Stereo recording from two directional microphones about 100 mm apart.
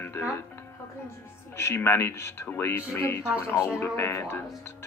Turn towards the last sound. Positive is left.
turn(degrees=25)  # may be behind; listen again after turning